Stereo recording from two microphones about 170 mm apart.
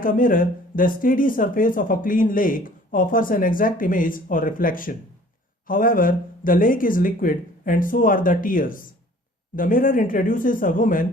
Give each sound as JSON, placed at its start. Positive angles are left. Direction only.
{"t": 0.0, "sound": "speech", "side_deg": 55}